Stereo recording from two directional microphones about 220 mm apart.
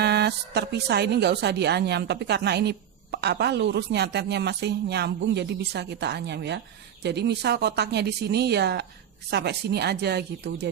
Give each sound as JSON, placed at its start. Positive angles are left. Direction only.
{"t": 0.0, "sound": "speech", "side_deg": -50}